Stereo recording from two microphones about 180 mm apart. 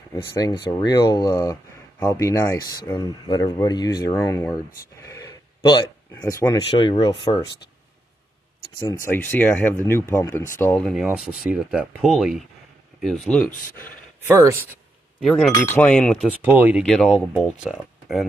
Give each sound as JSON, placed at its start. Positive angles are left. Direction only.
{"t": 0.1, "sound": "speech", "side_deg": 20}
{"t": 6.7, "sound": "speech", "side_deg": 30}
{"t": 8.8, "sound": "speech", "side_deg": 15}
{"t": 10.6, "sound": "speech", "side_deg": 5}
{"t": 14.2, "sound": "speech", "side_deg": -15}
{"t": 15.1, "sound": "speech", "side_deg": 0}
{"t": 16.4, "sound": "speech", "side_deg": -10}
{"t": 16.8, "sound": "speech", "side_deg": 0}